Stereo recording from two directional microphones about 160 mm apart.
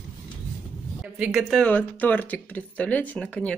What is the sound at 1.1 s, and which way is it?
Speech, 5° right (ahead or behind).